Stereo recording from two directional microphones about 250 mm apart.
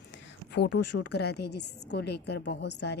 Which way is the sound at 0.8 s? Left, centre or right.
Left.